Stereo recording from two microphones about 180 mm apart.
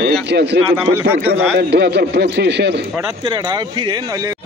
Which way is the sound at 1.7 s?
65° right (ahead or behind).